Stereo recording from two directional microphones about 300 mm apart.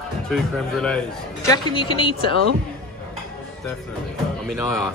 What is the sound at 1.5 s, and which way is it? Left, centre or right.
Speech, centre.